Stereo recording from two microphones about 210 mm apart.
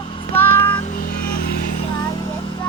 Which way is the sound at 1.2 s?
45° left (ahead or behind).